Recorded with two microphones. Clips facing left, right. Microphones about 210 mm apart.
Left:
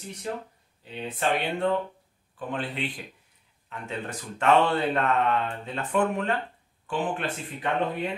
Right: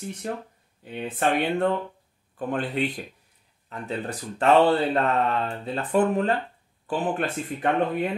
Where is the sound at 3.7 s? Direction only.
35° right (ahead or behind).